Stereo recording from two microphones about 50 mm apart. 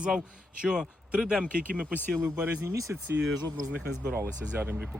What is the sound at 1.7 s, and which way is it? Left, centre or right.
Speech, right.